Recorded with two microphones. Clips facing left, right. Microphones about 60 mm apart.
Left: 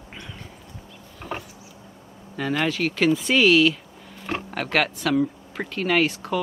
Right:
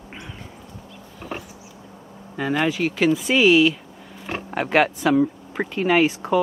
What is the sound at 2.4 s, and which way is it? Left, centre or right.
Speech, centre.